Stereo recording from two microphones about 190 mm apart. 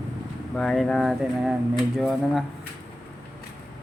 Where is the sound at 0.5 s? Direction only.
Centre (ahead or behind).